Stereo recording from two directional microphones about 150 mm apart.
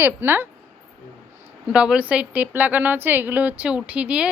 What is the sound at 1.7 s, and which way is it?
A woman's voice, 5° right (ahead or behind).